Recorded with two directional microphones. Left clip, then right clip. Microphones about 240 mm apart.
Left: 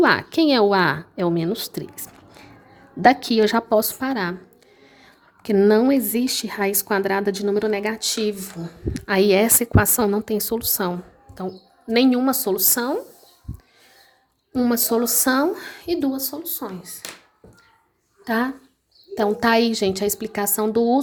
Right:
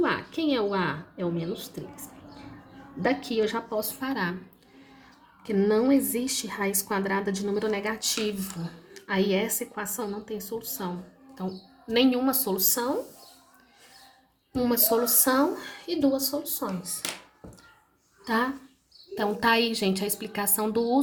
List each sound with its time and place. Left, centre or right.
0.0 s a woman's voice: left
3.0 s a woman's voice: left
5.4 s a woman's voice: left
14.5 s a woman's voice: left
18.3 s a woman's voice: left